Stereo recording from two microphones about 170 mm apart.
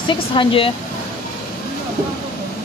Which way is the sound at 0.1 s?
30° left (ahead or behind).